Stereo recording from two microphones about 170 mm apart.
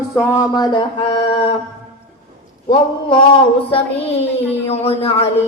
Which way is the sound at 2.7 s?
30° left (ahead or behind).